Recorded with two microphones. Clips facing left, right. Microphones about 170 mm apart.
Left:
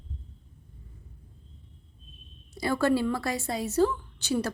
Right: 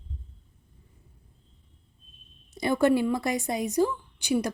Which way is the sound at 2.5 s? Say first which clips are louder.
Right 3 dB; 20° right (ahead or behind).